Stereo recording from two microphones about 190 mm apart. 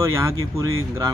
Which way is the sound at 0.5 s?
15° right (ahead or behind).